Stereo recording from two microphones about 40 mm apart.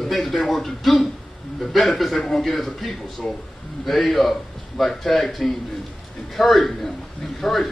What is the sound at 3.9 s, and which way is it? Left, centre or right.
A man's voice, centre.